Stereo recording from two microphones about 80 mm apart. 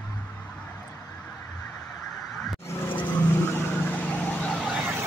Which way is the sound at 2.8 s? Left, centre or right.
Left.